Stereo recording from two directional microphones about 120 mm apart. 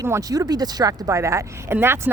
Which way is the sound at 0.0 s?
25° right (ahead or behind).